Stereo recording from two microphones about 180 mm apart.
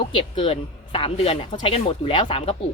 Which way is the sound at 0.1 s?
30° left (ahead or behind).